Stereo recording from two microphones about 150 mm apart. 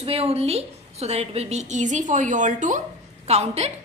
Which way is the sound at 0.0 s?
40° right (ahead or behind).